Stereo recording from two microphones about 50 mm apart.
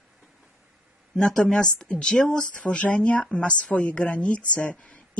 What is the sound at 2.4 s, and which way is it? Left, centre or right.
A woman's voice, left.